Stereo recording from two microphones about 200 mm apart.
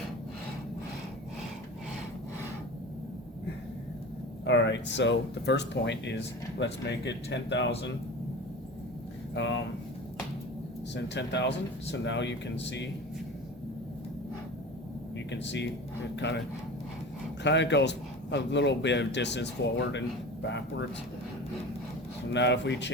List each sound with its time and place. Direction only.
4.4 s a man's voice: 65° left (ahead or behind)
9.3 s speech: 65° left (ahead or behind)
10.9 s a man's voice: 60° left (ahead or behind)
15.3 s a man's voice: 60° left (ahead or behind)
17.4 s a man's voice: 60° left (ahead or behind)
22.3 s a man's voice: 60° left (ahead or behind)